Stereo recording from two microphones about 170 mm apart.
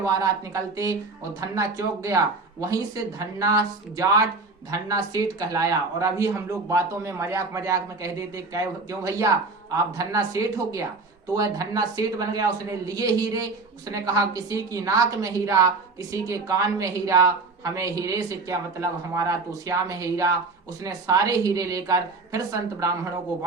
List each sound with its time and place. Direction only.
0.0 s a woman's voice: 20° right (ahead or behind)